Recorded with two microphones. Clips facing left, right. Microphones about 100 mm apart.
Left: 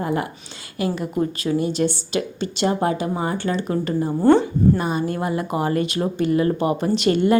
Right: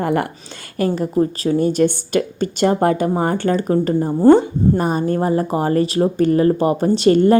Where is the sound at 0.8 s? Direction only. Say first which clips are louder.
Right 5 dB; 45° right (ahead or behind).